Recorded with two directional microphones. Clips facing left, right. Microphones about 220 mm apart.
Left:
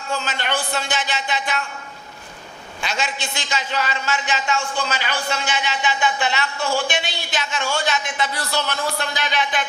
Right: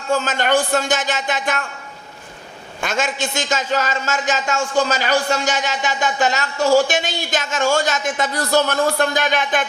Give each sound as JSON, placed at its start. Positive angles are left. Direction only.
{"t": 0.1, "sound": "a man's voice", "side_deg": -45}
{"t": 2.8, "sound": "a man's voice", "side_deg": -50}